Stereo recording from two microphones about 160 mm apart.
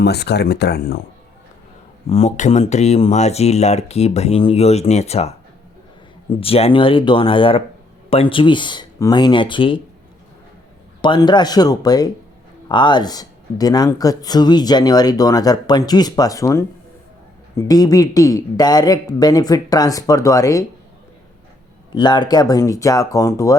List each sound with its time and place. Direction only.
0.0 s speech: 90° left
2.0 s speech: 40° left (ahead or behind)
6.3 s speech: 35° left (ahead or behind)
11.0 s speech: 30° left (ahead or behind)
21.9 s speech: 30° left (ahead or behind)